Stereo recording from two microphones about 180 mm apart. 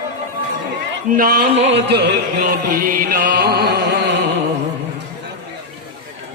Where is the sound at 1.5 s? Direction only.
35° right (ahead or behind).